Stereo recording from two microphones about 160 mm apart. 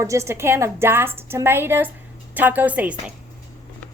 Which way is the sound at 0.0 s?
20° right (ahead or behind).